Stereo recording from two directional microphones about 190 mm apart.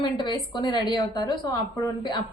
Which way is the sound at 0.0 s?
25° left (ahead or behind).